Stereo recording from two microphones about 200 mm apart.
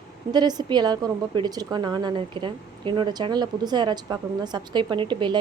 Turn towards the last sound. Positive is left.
turn(degrees=-25)  # may be behind; listen again after turning